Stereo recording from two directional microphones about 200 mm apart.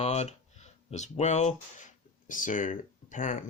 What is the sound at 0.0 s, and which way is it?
Speech, 35° left (ahead or behind).